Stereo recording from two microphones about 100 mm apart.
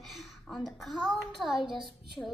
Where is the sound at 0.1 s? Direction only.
Centre (ahead or behind).